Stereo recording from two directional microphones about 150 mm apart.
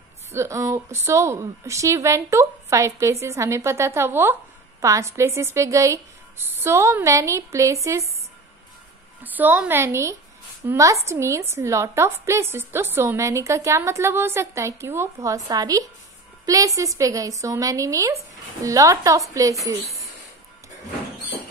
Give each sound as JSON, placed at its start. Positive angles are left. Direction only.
{"t": 0.3, "sound": "a woman's voice", "side_deg": -20}
{"t": 9.2, "sound": "a woman's voice", "side_deg": -10}